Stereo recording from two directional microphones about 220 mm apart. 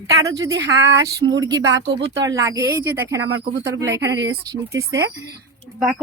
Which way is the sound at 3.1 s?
55° right (ahead or behind).